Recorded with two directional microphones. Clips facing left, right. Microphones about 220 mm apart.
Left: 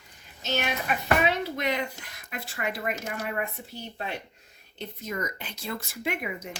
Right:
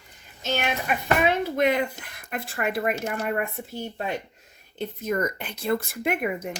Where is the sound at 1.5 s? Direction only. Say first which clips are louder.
Right 7 dB; 55° right (ahead or behind).